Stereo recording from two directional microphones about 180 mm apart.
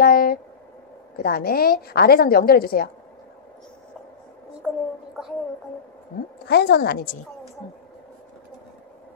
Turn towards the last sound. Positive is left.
turn(degrees=55)  # may be behind; listen again after turning